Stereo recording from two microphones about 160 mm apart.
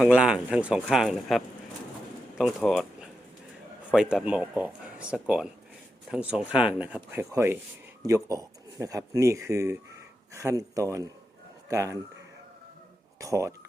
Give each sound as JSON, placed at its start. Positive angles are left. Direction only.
{"t": 0.0, "sound": "speech", "side_deg": -5}
{"t": 2.6, "sound": "a sound", "side_deg": 0}
{"t": 3.9, "sound": "speech", "side_deg": -5}
{"t": 13.1, "sound": "speech", "side_deg": -20}